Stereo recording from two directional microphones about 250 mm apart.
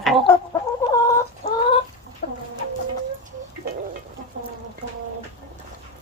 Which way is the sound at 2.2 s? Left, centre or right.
Left.